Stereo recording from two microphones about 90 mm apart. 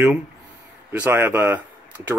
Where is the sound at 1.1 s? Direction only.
25° right (ahead or behind).